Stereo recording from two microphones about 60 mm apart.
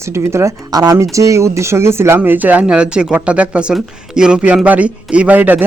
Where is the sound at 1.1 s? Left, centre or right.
Right; by 4.3 s centre.